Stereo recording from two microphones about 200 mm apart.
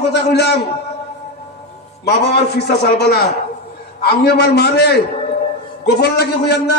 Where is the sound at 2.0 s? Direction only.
55° left (ahead or behind).